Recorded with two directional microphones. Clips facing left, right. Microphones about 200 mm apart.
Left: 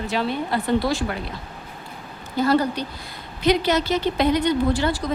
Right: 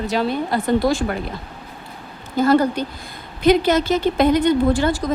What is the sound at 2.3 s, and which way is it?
A woman's voice, 50° right (ahead or behind).